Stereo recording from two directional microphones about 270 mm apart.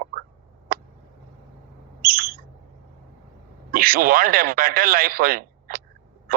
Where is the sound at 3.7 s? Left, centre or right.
Right.